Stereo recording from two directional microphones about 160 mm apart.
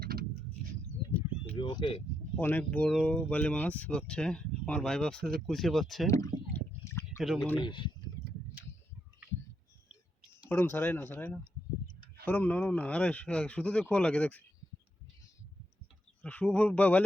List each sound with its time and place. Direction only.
0.0 s vehicle: 75° right (ahead or behind)
1.5 s speech: 30° left (ahead or behind)
2.4 s speech: 10° left (ahead or behind)
6.1 s speech: 20° left (ahead or behind)
6.8 s a sound: 15° left (ahead or behind)
7.2 s speech: centre (ahead or behind)
7.6 s speech: 30° left (ahead or behind)
10.5 s speech: 10° left (ahead or behind)
16.2 s speech: 10° left (ahead or behind)